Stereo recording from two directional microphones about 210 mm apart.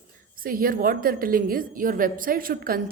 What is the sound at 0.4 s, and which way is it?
A woman's voice, 45° right (ahead or behind).